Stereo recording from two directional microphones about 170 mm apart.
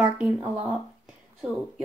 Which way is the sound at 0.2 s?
10° right (ahead or behind).